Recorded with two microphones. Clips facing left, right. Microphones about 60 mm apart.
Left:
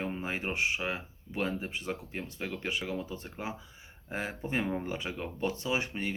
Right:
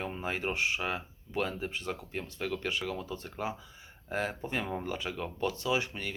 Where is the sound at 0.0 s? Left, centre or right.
Centre.